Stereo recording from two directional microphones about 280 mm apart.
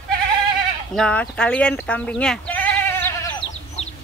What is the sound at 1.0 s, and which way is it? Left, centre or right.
Speech, centre.